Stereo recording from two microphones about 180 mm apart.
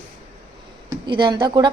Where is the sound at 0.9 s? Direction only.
25° right (ahead or behind).